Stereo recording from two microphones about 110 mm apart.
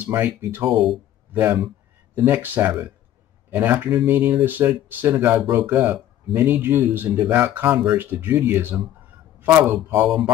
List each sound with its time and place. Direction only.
0.1 s speech: 20° right (ahead or behind)